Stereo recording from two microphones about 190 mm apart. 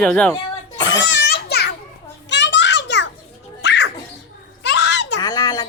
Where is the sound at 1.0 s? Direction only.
70° left (ahead or behind).